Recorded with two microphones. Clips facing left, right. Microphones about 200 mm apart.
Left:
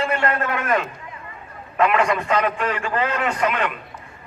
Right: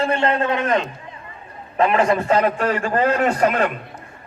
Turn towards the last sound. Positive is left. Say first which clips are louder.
# right 4 dB
turn(degrees=-45)  # may be behind; listen again after turning